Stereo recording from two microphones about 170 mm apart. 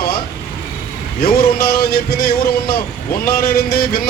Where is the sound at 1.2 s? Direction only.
65° left (ahead or behind).